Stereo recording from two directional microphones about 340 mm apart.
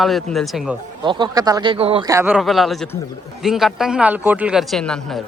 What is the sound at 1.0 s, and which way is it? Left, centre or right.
Speech, centre.